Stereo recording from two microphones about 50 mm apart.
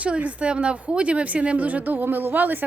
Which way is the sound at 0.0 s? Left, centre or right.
Right.